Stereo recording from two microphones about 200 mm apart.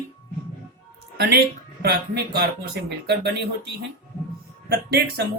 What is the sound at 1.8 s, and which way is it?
Music, 50° right (ahead or behind).